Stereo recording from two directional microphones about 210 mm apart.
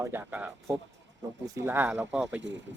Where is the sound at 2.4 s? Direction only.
60° right (ahead or behind).